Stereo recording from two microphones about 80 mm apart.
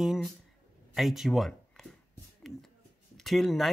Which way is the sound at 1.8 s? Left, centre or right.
Centre.